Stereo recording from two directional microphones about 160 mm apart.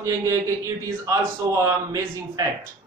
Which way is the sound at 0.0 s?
20° right (ahead or behind).